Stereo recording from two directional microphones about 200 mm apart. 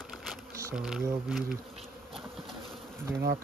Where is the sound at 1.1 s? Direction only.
5° right (ahead or behind).